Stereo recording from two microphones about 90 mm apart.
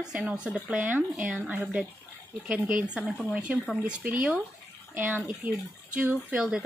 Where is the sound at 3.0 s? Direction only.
Centre (ahead or behind).